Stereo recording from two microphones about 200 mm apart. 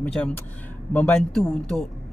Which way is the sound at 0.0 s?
5° left (ahead or behind).